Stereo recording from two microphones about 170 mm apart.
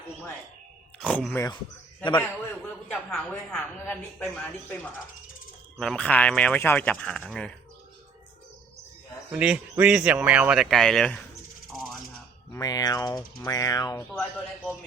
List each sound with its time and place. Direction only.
0.9 s speech: 5° left (ahead or behind)
2.9 s speech: 5° left (ahead or behind)
9.3 s speech: 5° right (ahead or behind)
12.5 s speech: 20° left (ahead or behind)